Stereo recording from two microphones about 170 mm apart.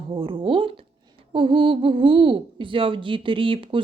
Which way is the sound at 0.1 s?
30° right (ahead or behind).